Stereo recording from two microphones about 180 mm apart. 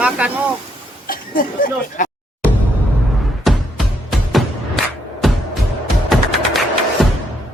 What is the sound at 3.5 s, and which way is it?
Music, centre (ahead or behind).